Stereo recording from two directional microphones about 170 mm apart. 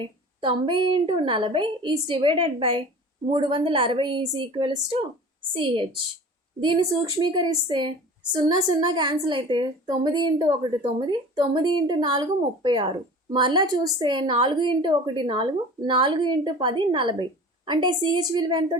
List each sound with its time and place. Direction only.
0.0 s a woman's voice: 30° right (ahead or behind)